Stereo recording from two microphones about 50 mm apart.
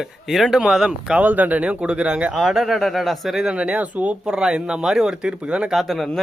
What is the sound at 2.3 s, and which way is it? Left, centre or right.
Speech, centre.